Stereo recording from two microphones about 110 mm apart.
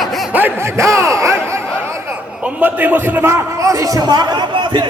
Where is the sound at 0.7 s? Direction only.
25° right (ahead or behind).